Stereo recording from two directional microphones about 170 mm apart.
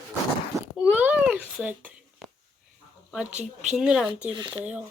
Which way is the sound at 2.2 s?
Centre (ahead or behind).